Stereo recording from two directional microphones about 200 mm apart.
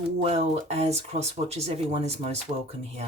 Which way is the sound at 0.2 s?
30° right (ahead or behind).